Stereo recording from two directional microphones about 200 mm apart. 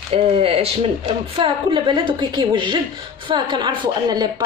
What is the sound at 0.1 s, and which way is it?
A woman's voice, 30° right (ahead or behind).